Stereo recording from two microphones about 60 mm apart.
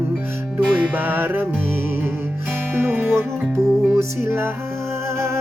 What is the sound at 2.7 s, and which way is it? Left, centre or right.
Music, right.